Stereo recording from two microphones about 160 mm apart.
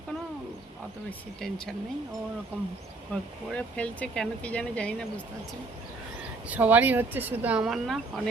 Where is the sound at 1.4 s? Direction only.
5° left (ahead or behind).